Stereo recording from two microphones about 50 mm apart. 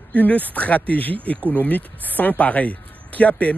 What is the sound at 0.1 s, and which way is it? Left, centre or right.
Speech, left.